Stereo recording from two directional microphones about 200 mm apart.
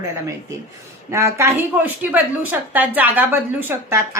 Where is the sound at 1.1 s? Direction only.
15° right (ahead or behind).